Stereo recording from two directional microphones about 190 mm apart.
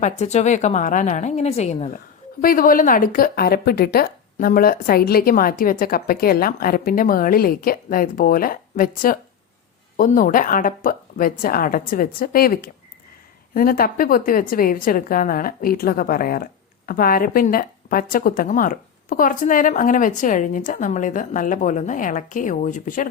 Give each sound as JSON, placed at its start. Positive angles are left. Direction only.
{"t": 0.0, "sound": "a woman's voice", "side_deg": 35}
{"t": 2.4, "sound": "a woman's voice", "side_deg": 50}